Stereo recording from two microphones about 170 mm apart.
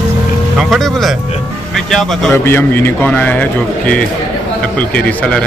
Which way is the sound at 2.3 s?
15° left (ahead or behind).